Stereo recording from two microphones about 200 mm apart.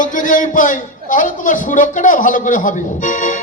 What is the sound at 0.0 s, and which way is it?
A man's voice, 40° left (ahead or behind).